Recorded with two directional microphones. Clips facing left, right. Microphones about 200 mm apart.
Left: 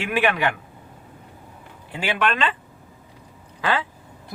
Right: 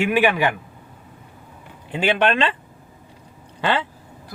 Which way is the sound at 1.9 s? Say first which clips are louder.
Right 5 dB; 25° right (ahead or behind).